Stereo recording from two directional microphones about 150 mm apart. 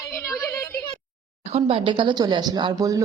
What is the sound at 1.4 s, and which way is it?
A woman's voice, 45° right (ahead or behind).